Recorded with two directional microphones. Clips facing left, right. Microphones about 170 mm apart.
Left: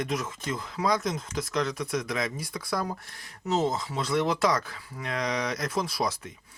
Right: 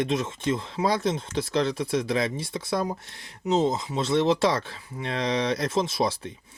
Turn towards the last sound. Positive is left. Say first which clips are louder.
# right 4 dB
turn(degrees=-30)  # may be behind; listen again after turning